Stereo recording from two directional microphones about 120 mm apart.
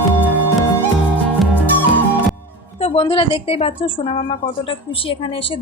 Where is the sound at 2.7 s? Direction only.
55° left (ahead or behind).